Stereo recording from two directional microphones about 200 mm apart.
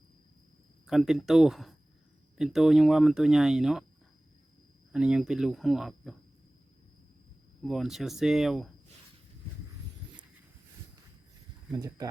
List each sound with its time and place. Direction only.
0.9 s speech: centre (ahead or behind)
4.9 s speech: 5° right (ahead or behind)
7.6 s speech: centre (ahead or behind)
11.7 s speech: 20° right (ahead or behind)